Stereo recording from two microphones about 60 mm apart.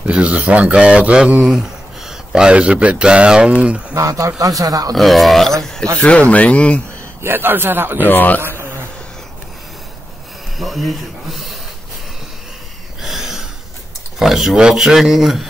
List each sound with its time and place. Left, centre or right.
0.0 s speech: right
3.9 s speech: right
4.4 s speech: right
4.9 s speech: centre
5.9 s speech: centre
7.2 s a man's voice: right
8.1 s a man's voice: left
10.6 s speech: centre
13.0 s a sound: centre
14.2 s speech: centre